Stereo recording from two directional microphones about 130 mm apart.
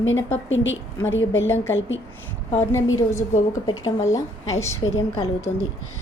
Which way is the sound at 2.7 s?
20° left (ahead or behind).